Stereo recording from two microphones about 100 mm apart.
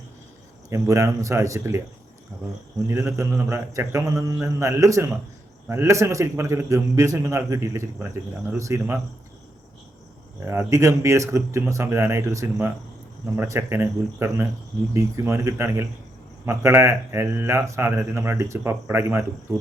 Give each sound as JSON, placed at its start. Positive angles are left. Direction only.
{"t": 0.7, "sound": "a man's voice", "side_deg": -30}
{"t": 2.8, "sound": "a man's voice", "side_deg": -30}
{"t": 10.4, "sound": "a man's voice", "side_deg": -25}